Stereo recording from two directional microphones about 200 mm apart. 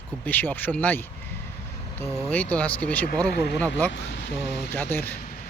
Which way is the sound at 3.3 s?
55° left (ahead or behind).